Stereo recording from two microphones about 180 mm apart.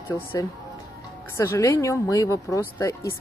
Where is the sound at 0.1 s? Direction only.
15° left (ahead or behind).